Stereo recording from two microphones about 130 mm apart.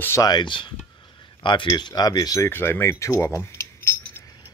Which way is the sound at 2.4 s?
15° left (ahead or behind).